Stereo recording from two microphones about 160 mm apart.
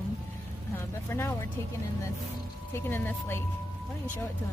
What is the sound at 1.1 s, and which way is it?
Speech, 15° left (ahead or behind).